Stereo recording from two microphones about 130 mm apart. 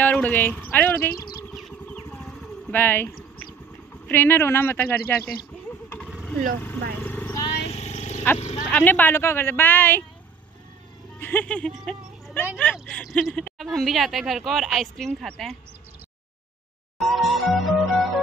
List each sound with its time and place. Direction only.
0.0 s speech: 10° left (ahead or behind)
1.5 s music: centre (ahead or behind)
2.7 s speech: 15° left (ahead or behind)
6.6 s a sound: 15° left (ahead or behind)
7.6 s vehicle: 55° left (ahead or behind)
8.4 s speech: 55° left (ahead or behind)
8.6 s speech: 15° left (ahead or behind)
11.1 s speech: 15° left (ahead or behind)
17.0 s music: centre (ahead or behind)